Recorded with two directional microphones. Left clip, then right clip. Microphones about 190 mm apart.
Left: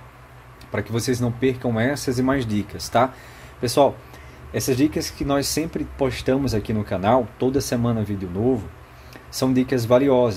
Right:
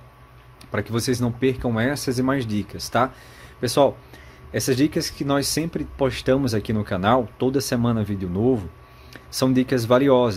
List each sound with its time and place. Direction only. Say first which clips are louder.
0.7 s speech: even; 25° right (ahead or behind)